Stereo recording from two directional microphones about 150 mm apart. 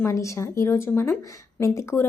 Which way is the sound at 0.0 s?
20° left (ahead or behind).